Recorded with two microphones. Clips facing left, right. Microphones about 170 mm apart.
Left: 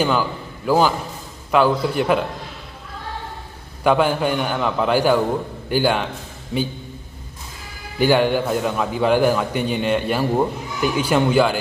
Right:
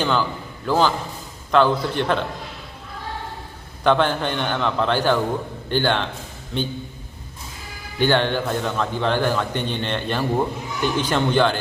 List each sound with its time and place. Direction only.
0.0 s a man's voice: 10° left (ahead or behind)
3.8 s a man's voice: 10° left (ahead or behind)
7.9 s a man's voice: 10° left (ahead or behind)